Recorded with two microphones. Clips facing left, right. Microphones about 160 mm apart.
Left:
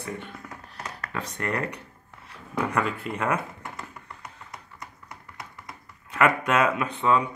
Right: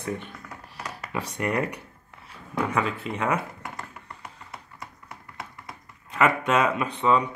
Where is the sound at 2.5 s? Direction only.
Centre (ahead or behind).